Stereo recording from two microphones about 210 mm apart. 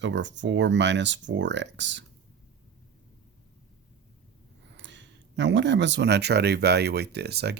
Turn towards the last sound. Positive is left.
turn(degrees=-50)  # may be behind; listen again after turning